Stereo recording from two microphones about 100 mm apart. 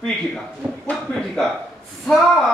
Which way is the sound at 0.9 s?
5° left (ahead or behind).